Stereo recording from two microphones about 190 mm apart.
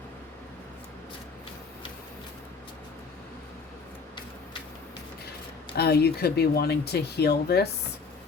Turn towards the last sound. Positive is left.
turn(degrees=60)  # may be behind; listen again after turning